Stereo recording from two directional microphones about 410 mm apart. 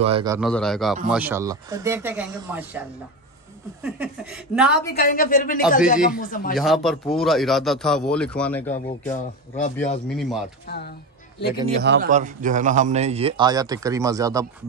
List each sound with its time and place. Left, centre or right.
0.0 s a man's voice: centre
3.8 s speech: centre
4.9 s a woman's voice: left
6.5 s speech: centre
8.6 s speech: centre
10.0 s speech: centre
11.7 s a man's voice: right